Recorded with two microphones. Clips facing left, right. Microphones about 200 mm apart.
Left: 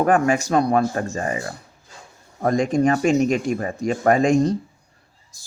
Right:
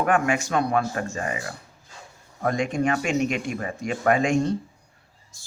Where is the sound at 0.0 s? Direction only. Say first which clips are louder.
Left 4 dB; 40° left (ahead or behind).